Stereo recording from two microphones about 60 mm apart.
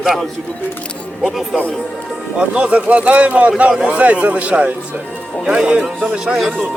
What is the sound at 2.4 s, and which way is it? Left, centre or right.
A man's voice, right.